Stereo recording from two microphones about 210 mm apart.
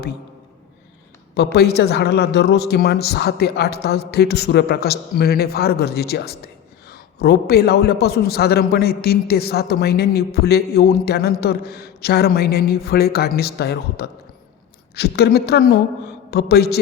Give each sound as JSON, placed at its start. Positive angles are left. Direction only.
{"t": 1.5, "sound": "speech", "side_deg": 50}